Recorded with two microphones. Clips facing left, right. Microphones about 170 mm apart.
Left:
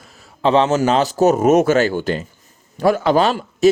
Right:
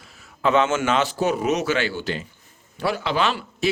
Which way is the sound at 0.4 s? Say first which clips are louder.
Left 5 dB; 35° left (ahead or behind).